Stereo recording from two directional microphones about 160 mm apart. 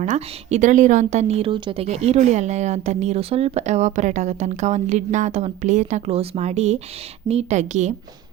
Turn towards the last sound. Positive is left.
turn(degrees=-45)  # may be behind; listen again after turning